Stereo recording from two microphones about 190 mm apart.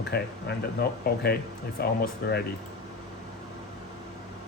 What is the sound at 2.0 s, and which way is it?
Speech, 60° left (ahead or behind).